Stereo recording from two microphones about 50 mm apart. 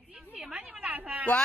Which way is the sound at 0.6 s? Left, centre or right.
Right.